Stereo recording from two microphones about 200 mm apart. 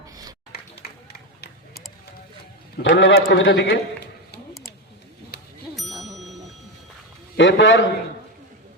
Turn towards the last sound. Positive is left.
turn(degrees=65)  # may be behind; listen again after turning